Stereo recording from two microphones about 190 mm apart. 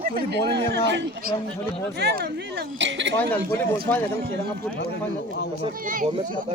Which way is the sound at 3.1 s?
10° left (ahead or behind).